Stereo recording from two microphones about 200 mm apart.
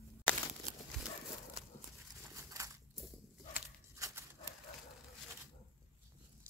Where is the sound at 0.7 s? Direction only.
45° right (ahead or behind).